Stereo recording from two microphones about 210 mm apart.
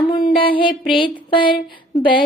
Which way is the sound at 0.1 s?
25° left (ahead or behind).